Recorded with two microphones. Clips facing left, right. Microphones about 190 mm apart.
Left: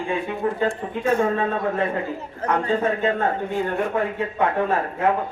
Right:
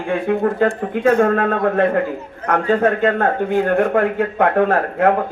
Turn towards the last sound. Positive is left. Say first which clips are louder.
# right 5 dB
turn(degrees=-70)  # may be behind; listen again after turning